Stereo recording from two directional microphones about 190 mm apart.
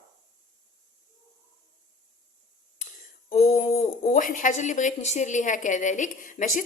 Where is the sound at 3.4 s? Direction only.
40° left (ahead or behind).